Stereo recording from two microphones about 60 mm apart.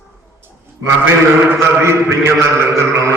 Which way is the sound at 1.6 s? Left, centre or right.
Right.